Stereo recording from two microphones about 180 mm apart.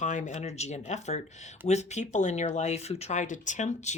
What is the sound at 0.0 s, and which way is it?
Speech, 45° left (ahead or behind).